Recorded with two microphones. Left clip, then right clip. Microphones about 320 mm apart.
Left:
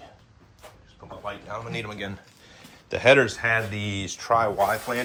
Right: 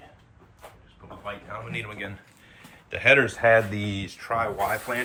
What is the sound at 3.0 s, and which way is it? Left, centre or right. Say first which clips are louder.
Speech: left 1 dB; centre.